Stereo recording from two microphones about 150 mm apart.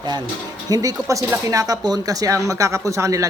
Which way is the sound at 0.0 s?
25° right (ahead or behind).